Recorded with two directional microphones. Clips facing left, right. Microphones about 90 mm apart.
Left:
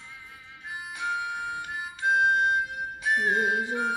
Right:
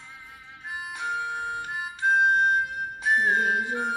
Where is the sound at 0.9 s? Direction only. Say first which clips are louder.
Even; 30° right (ahead or behind).